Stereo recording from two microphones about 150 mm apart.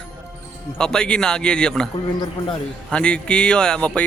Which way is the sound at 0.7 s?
5° left (ahead or behind).